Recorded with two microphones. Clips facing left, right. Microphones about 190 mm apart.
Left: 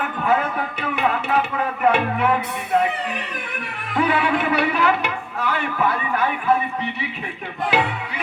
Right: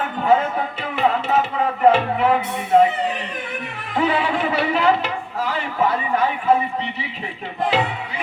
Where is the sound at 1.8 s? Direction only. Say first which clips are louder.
Right 3 dB; 30° right (ahead or behind).